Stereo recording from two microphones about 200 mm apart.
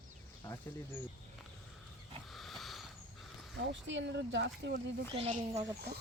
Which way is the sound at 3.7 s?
65° right (ahead or behind).